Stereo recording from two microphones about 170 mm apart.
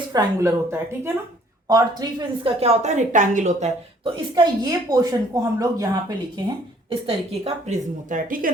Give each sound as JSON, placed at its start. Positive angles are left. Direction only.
{"t": 0.1, "sound": "speech", "side_deg": -20}
{"t": 4.0, "sound": "speech", "side_deg": -25}
{"t": 7.1, "sound": "a woman's voice", "side_deg": -40}